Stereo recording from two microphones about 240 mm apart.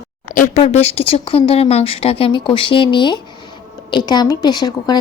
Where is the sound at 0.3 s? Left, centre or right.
Left.